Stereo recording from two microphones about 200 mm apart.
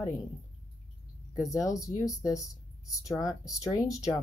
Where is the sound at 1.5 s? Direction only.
15° left (ahead or behind).